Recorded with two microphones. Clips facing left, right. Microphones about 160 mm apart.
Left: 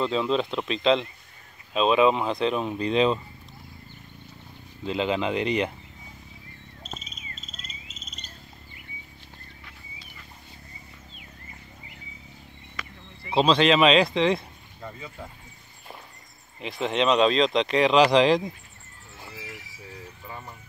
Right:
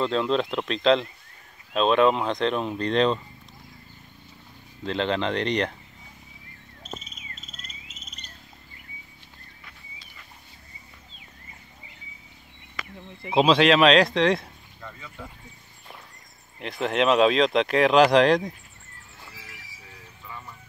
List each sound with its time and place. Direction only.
0.0 s speech: centre (ahead or behind)
4.8 s speech: 5° left (ahead or behind)
13.3 s speech: centre (ahead or behind)
14.8 s a sound: 20° left (ahead or behind)
16.5 s speech: centre (ahead or behind)
20.2 s vehicle: 40° left (ahead or behind)